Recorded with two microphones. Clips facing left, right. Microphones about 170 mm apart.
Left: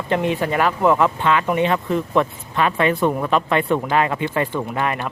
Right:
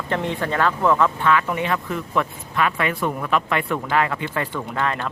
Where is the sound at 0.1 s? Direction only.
15° left (ahead or behind).